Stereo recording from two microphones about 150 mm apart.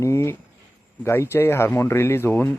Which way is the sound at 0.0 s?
20° left (ahead or behind).